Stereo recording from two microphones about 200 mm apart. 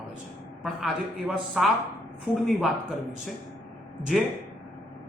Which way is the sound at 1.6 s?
5° right (ahead or behind).